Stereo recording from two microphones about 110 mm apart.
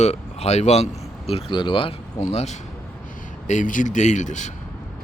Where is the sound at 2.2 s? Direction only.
90° left.